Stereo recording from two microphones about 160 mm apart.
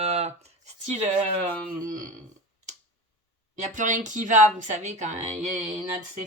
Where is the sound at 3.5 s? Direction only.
50° right (ahead or behind).